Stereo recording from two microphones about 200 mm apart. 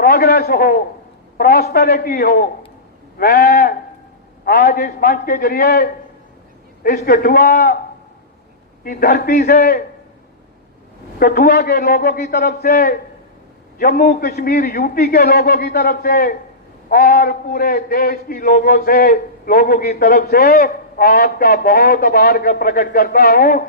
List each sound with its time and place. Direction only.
0.0 s a sound: 50° left (ahead or behind)
1.7 s a man's voice: 50° left (ahead or behind)
8.8 s a man's voice: 45° left (ahead or behind)
11.2 s a man's voice: 45° left (ahead or behind)